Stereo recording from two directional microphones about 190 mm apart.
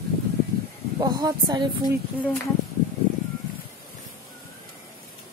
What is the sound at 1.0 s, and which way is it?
Speech, 20° right (ahead or behind).